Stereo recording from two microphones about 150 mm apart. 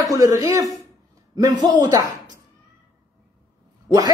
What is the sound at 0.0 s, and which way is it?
A man's voice, 20° right (ahead or behind).